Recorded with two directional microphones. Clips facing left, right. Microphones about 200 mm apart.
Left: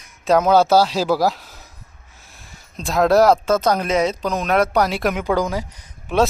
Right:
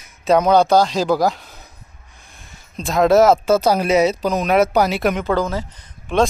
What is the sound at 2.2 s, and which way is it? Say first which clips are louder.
Speech: even; centre (ahead or behind).